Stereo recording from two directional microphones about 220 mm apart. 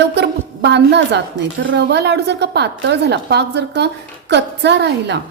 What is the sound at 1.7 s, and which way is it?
A woman's voice, 50° right (ahead or behind).